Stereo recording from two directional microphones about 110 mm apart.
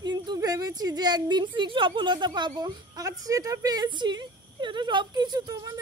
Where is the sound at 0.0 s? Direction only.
40° right (ahead or behind).